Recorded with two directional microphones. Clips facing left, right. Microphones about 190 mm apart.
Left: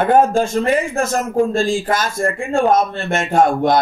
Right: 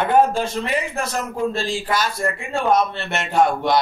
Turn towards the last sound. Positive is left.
turn(degrees=50)  # may be behind; listen again after turning